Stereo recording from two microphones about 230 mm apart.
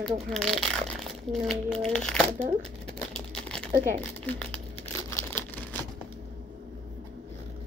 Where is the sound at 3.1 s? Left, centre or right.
Centre.